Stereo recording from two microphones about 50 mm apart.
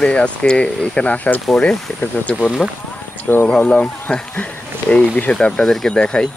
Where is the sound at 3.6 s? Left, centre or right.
Left.